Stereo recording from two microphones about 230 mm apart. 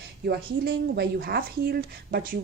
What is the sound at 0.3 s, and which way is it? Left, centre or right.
A woman's voice, right.